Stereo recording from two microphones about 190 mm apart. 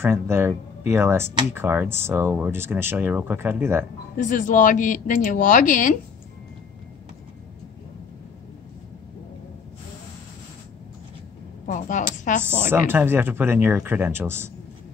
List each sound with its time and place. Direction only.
0.0 s speech: 10° right (ahead or behind)
4.2 s speech: 40° left (ahead or behind)
11.6 s speech: 40° left (ahead or behind)
12.6 s speech: 10° right (ahead or behind)